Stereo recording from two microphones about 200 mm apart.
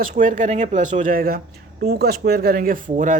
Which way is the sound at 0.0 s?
40° right (ahead or behind).